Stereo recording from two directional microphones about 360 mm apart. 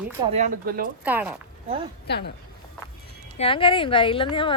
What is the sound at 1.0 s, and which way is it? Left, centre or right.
Speech, centre.